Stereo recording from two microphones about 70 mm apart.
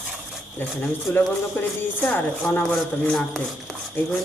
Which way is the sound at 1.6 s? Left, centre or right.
Left.